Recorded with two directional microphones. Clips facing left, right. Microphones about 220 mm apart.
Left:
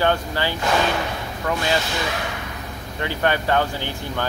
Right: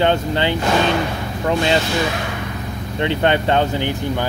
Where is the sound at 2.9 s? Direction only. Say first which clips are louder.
Right 5 dB; 25° right (ahead or behind).